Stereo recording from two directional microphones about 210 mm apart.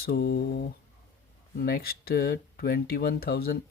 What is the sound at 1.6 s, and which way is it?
Speech, 45° left (ahead or behind).